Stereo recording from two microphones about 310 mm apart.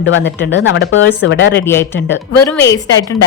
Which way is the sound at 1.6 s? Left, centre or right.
Centre.